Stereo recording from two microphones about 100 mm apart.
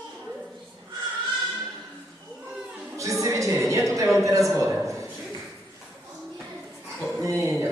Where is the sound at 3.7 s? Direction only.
30° right (ahead or behind).